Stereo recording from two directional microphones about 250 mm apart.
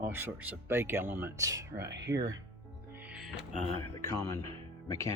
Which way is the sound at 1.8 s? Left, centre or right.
Right.